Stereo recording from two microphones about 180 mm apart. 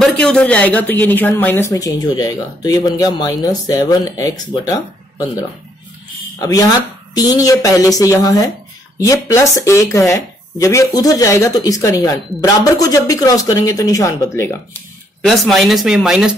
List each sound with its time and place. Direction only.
0.0 s speech: 5° left (ahead or behind)
7.2 s speech: 20° left (ahead or behind)
15.2 s speech: centre (ahead or behind)